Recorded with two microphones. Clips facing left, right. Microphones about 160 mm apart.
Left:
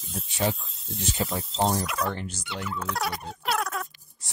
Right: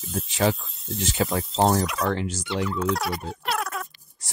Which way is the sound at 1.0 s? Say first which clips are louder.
Right 4 dB; 90° right.